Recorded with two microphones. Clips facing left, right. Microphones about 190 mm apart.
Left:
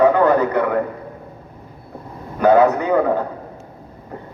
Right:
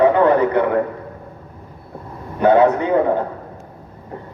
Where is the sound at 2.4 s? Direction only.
25° right (ahead or behind).